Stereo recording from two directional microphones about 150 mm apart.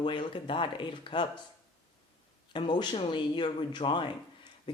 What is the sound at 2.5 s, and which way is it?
Speech, 30° left (ahead or behind).